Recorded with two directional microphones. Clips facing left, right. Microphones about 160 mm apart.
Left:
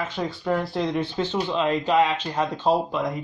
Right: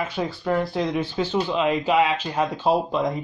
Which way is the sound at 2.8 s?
20° right (ahead or behind).